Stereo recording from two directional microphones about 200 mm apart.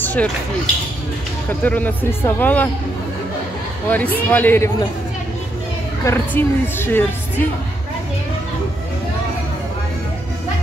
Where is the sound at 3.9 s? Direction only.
10° left (ahead or behind).